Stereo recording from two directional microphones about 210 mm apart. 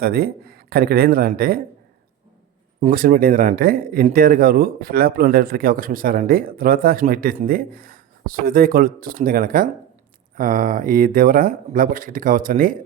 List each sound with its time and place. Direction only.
0.0 s speech: 45° right (ahead or behind)
2.8 s speech: 40° right (ahead or behind)